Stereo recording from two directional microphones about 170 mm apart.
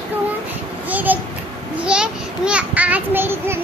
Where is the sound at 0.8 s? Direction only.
10° right (ahead or behind).